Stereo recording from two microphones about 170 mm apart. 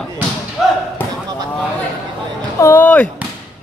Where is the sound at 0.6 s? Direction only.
Centre (ahead or behind).